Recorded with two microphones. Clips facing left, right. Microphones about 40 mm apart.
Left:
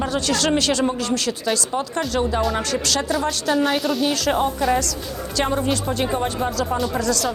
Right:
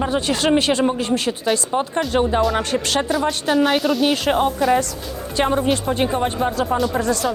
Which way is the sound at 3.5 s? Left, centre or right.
Centre.